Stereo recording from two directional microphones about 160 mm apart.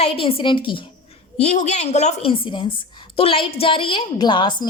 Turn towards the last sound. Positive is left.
turn(degrees=30)  # may be behind; listen again after turning